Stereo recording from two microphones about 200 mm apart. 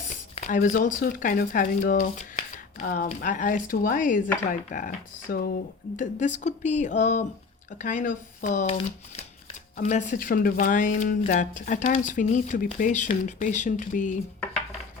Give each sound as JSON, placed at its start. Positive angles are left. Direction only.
{"t": 0.3, "sound": "speech", "side_deg": 40}
{"t": 9.7, "sound": "speech", "side_deg": 40}